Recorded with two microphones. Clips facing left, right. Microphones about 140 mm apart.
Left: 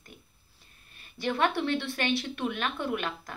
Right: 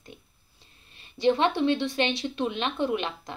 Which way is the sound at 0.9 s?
25° right (ahead or behind).